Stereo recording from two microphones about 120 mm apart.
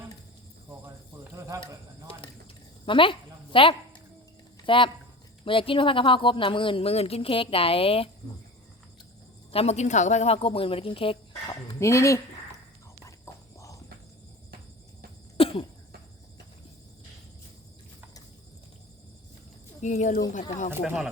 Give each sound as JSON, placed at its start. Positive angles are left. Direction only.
{"t": 1.4, "sound": "a sound", "side_deg": -30}
{"t": 2.8, "sound": "a sound", "side_deg": 45}
{"t": 4.6, "sound": "speech", "side_deg": 45}
{"t": 9.5, "sound": "speech", "side_deg": 60}
{"t": 11.4, "sound": "speech", "side_deg": 25}
{"t": 13.6, "sound": "cricket", "side_deg": 30}
{"t": 15.4, "sound": "cough", "side_deg": 50}
{"t": 19.8, "sound": "speech", "side_deg": 85}
{"t": 20.8, "sound": "speech", "side_deg": -5}